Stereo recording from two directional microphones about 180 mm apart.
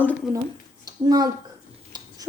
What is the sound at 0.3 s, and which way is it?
Speech, 10° right (ahead or behind).